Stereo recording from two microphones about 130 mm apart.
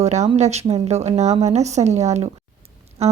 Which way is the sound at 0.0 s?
65° right (ahead or behind).